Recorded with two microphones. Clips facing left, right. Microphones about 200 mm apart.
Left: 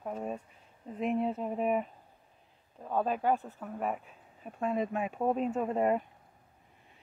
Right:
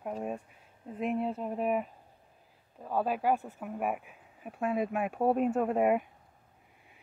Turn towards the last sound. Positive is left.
turn(degrees=-10)  # may be behind; listen again after turning